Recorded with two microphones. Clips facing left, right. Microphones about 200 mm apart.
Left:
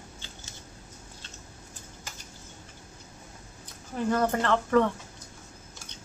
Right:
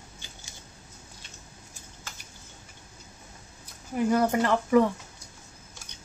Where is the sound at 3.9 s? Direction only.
10° right (ahead or behind).